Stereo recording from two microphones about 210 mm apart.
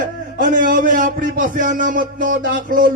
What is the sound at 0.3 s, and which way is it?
A man's voice, 40° right (ahead or behind).